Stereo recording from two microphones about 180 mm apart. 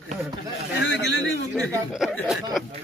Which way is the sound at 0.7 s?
75° left (ahead or behind).